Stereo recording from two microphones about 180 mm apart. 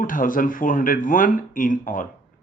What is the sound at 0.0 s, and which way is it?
Speech, 50° left (ahead or behind).